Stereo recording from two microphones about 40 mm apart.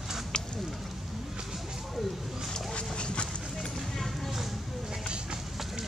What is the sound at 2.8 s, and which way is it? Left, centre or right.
Dog, left.